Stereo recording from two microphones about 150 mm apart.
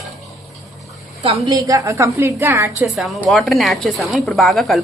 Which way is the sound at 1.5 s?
25° right (ahead or behind).